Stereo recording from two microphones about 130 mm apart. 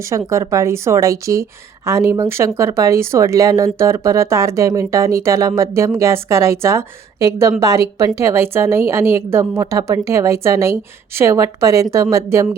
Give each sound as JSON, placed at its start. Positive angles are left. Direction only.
{"t": 0.1, "sound": "a woman's voice", "side_deg": -25}